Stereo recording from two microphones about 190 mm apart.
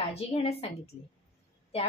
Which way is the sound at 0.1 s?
30° left (ahead or behind).